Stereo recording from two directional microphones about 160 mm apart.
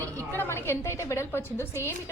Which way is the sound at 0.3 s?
15° left (ahead or behind).